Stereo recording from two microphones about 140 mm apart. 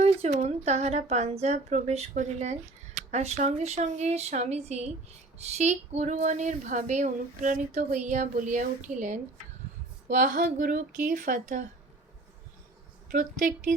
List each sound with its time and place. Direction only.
0.0 s a woman's voice: 50° right (ahead or behind); by 11.6 s 70° right (ahead or behind)